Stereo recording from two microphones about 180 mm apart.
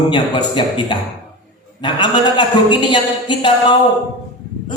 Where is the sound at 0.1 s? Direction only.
25° left (ahead or behind).